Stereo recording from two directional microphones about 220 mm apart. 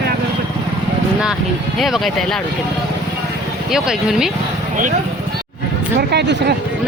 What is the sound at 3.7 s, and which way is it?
Speech, centre (ahead or behind).